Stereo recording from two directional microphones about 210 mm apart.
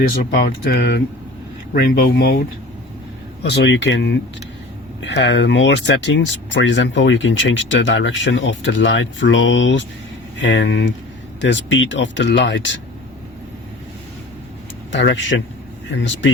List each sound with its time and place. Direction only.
0.2 s speech: 40° left (ahead or behind)
3.5 s speech: 55° left (ahead or behind)
14.9 s speech: 60° left (ahead or behind)